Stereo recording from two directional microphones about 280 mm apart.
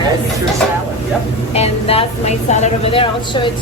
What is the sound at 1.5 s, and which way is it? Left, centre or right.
A woman's voice, left.